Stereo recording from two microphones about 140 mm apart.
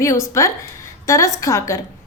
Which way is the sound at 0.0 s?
20° left (ahead or behind).